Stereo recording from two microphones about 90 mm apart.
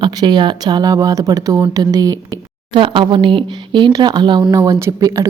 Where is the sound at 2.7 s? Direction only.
70° right (ahead or behind).